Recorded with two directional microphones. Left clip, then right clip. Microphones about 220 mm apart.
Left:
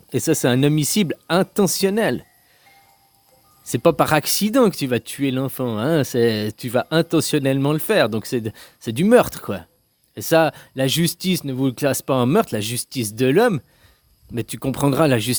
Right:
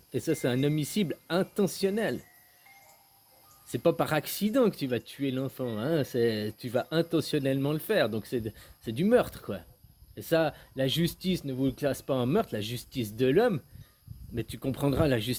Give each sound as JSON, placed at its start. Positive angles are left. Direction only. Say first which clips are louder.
{"t": 0.1, "sound": "speech", "louder": "left 10 dB", "side_deg": 45}
{"t": 3.7, "sound": "speech", "louder": "left 10 dB", "side_deg": 40}